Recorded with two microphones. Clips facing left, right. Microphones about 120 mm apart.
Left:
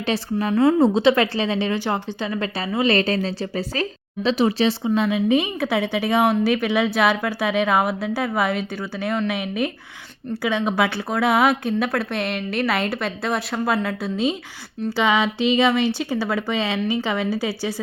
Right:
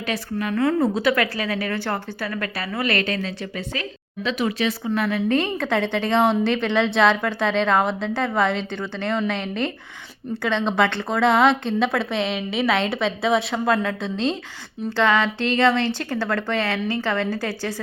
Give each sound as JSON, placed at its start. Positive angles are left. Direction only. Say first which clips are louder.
{"t": 0.1, "sound": "a woman's voice", "louder": "left 4 dB", "side_deg": 30}
{"t": 5.0, "sound": "a woman's voice", "louder": "even", "side_deg": 15}